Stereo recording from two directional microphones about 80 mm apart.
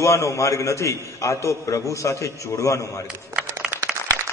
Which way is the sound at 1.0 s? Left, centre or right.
Left.